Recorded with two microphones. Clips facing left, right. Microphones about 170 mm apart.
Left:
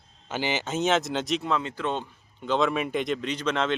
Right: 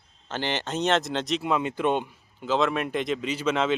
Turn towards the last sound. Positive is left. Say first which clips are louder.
# right 2 dB
turn(degrees=-5)  # may be behind; listen again after turning